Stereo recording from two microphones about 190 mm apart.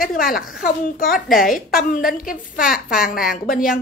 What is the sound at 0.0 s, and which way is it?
A woman's voice, 50° left (ahead or behind).